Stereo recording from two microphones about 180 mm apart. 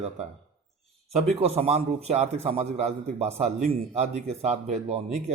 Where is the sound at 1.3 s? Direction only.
35° right (ahead or behind).